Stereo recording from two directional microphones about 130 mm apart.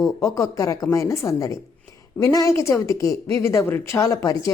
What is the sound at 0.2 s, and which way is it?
Speech, 25° left (ahead or behind).